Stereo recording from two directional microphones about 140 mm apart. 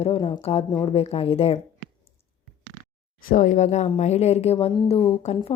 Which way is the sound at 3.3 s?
65° left (ahead or behind).